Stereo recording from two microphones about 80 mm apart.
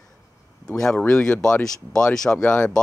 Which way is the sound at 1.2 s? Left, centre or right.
Centre.